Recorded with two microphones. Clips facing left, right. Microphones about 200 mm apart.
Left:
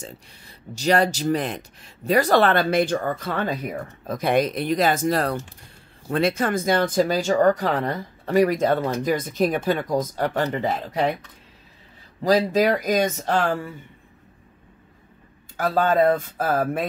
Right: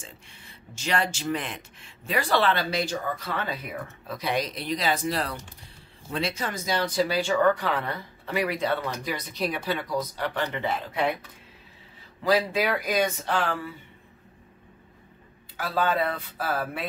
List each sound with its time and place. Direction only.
0.0 s speech: 40° left (ahead or behind)
12.2 s speech: 40° left (ahead or behind)
15.5 s speech: 45° left (ahead or behind)